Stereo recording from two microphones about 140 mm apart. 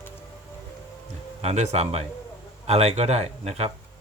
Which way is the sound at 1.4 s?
50° right (ahead or behind).